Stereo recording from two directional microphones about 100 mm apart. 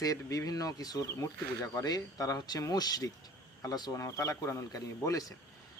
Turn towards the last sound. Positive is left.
turn(degrees=35)  # may be behind; listen again after turning